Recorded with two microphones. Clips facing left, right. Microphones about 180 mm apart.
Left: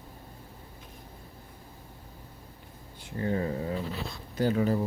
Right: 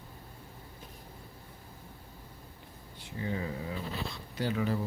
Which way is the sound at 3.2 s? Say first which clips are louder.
Left 6 dB; 45° left (ahead or behind).